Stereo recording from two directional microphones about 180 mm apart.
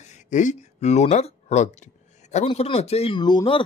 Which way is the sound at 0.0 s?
40° left (ahead or behind).